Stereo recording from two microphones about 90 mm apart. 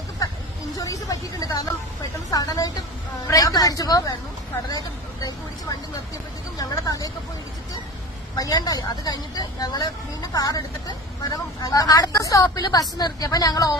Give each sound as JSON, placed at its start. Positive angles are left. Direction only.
{"t": 0.8, "sound": "vehicle", "side_deg": 40}
{"t": 2.3, "sound": "speech", "side_deg": 40}
{"t": 6.6, "sound": "speech", "side_deg": 45}
{"t": 8.4, "sound": "speech", "side_deg": 45}